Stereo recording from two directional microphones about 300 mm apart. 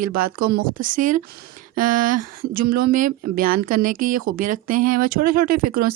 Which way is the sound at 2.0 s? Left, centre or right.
Right.